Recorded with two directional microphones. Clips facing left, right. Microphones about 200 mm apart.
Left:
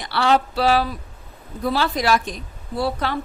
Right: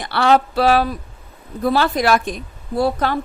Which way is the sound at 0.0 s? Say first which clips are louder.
Right 3 dB; 55° right (ahead or behind).